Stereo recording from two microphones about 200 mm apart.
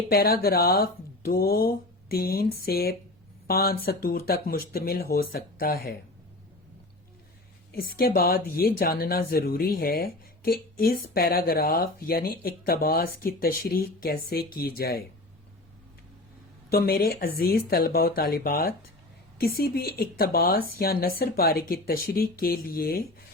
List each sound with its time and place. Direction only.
0.1 s speech: 50° left (ahead or behind)
7.7 s speech: 50° left (ahead or behind)
16.7 s speech: 50° left (ahead or behind)